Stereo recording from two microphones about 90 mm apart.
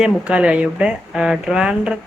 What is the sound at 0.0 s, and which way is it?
Speech, 15° right (ahead or behind).